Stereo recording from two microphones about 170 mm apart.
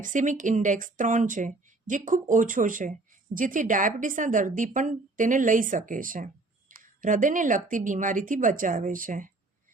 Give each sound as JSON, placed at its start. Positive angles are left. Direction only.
{"t": 0.0, "sound": "a woman's voice", "side_deg": -50}